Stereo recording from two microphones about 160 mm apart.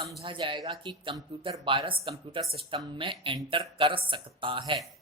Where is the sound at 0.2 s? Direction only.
30° right (ahead or behind).